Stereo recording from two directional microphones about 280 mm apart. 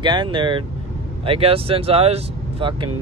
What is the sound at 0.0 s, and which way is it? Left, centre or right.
Speech, centre.